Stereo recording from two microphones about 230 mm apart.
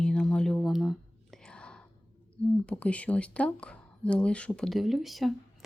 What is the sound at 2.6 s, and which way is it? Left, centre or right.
Speech, centre.